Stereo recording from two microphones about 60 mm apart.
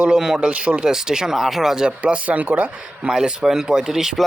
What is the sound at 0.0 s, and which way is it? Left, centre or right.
Speech, centre.